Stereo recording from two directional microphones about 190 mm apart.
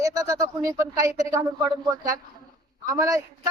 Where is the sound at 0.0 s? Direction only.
20° right (ahead or behind).